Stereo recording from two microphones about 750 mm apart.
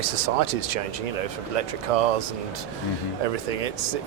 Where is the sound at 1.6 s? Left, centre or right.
Right.